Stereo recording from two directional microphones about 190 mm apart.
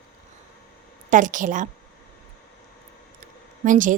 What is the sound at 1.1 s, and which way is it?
Speech, 40° right (ahead or behind).